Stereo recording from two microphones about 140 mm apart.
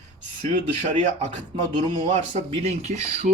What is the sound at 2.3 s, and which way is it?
Speech, 50° right (ahead or behind).